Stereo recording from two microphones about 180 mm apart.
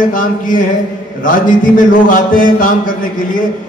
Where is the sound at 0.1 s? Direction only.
50° left (ahead or behind).